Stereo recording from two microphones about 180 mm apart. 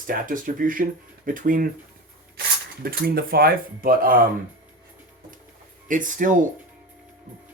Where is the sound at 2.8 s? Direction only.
55° right (ahead or behind).